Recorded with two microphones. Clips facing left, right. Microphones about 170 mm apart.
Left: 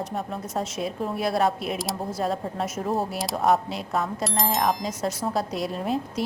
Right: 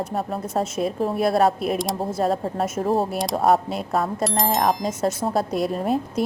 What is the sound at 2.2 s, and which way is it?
Speech, 50° right (ahead or behind).